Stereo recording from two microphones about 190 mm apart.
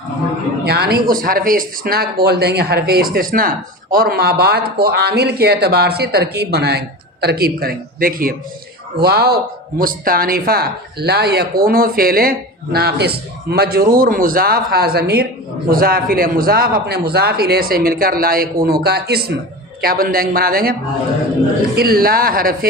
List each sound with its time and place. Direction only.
0.6 s a man's voice: 55° right (ahead or behind)
21.8 s a man's voice: 50° right (ahead or behind)